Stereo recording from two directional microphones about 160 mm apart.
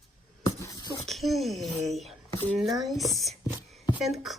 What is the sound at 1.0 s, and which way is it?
Speech, centre (ahead or behind).